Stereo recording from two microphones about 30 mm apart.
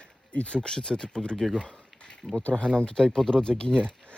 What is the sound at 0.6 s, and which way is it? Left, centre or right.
Speech, centre.